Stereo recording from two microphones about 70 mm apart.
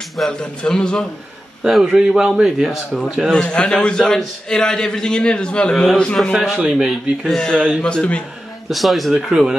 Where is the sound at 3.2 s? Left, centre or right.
Centre.